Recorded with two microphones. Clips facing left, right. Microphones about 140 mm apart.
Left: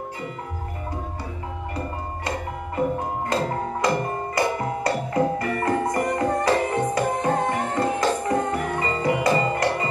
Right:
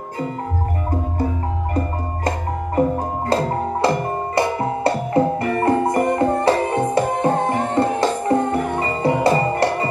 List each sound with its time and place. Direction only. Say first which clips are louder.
3.3 s music: right 6 dB; 30° right (ahead or behind)